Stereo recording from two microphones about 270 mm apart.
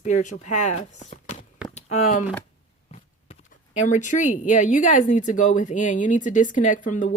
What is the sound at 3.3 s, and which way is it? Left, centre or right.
Speech, left.